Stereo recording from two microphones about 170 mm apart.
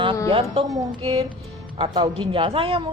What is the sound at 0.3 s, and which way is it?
A woman's voice, 30° right (ahead or behind).